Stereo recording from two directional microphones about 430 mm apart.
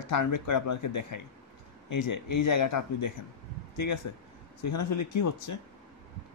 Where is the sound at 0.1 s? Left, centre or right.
Left.